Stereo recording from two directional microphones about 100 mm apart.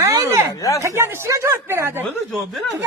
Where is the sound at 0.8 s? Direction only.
25° right (ahead or behind).